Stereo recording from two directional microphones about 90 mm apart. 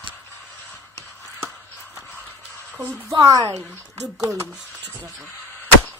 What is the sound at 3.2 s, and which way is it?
Speech, 40° right (ahead or behind).